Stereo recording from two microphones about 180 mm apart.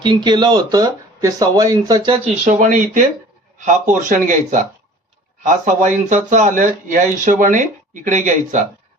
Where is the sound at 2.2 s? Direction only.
40° right (ahead or behind).